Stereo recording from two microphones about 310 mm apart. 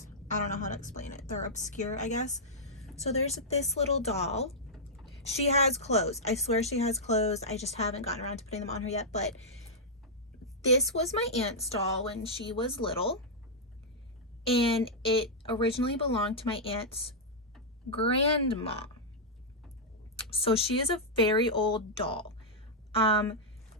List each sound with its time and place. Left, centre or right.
0.4 s speech: left
4.7 s a sound: centre
5.4 s speech: left
10.6 s speech: centre
14.6 s speech: centre
20.3 s speech: centre